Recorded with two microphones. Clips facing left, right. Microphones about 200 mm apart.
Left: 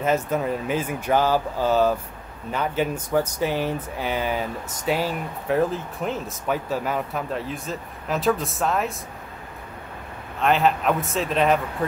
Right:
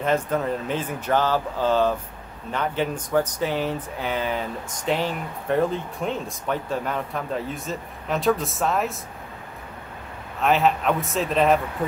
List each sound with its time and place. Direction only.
0.0 s speech: 5° left (ahead or behind)
10.4 s speech: centre (ahead or behind)